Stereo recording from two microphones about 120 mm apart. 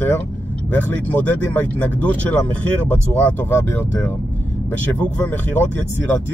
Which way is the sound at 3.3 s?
20° left (ahead or behind).